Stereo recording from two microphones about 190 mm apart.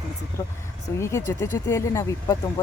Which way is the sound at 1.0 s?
15° left (ahead or behind).